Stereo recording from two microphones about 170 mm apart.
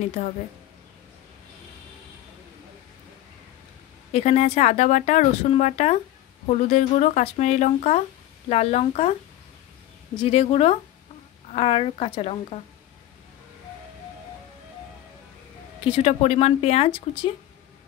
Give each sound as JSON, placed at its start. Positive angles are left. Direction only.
{"t": 4.1, "sound": "speech", "side_deg": 40}
{"t": 10.1, "sound": "speech", "side_deg": 35}
{"t": 15.8, "sound": "speech", "side_deg": 35}